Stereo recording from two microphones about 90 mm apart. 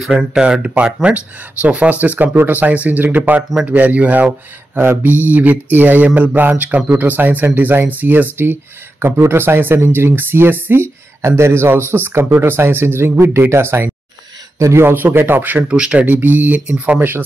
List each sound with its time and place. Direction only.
0.0 s speech: 5° right (ahead or behind); by 15.6 s 20° right (ahead or behind)
15.7 s speech: 10° right (ahead or behind)